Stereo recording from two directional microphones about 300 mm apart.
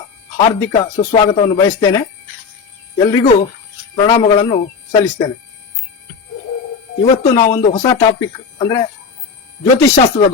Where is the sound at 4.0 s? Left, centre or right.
Centre.